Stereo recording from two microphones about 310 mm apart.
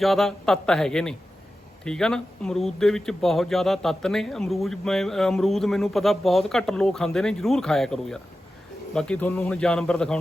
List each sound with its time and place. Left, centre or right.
0.0 s speech: centre